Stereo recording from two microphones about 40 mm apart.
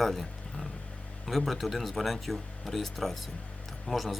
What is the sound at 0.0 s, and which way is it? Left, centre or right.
Speech, centre.